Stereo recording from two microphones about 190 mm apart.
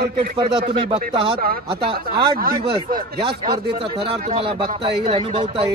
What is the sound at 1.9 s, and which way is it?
Speech, 25° right (ahead or behind).